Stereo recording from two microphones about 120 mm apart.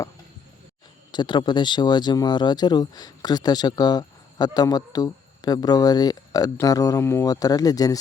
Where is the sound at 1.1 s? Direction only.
40° left (ahead or behind).